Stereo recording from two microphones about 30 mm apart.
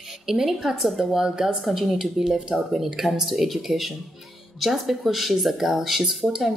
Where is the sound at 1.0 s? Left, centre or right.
Centre.